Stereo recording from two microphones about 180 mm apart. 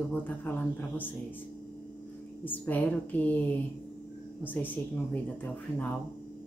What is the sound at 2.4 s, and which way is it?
A woman's voice, 10° left (ahead or behind).